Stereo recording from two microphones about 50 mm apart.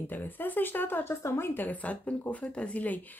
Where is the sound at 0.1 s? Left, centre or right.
Left.